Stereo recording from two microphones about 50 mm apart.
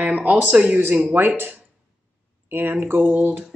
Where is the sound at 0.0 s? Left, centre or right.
Right.